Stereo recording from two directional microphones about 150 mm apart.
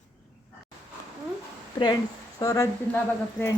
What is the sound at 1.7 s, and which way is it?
Speech, 30° left (ahead or behind).